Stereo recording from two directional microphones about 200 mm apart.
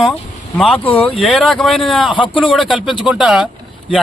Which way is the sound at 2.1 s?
25° left (ahead or behind).